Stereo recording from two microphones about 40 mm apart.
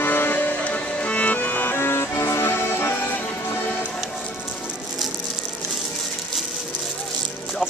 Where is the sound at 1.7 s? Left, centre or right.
Left.